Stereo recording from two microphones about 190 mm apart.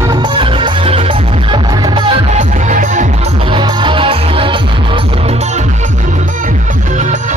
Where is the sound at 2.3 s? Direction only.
40° right (ahead or behind).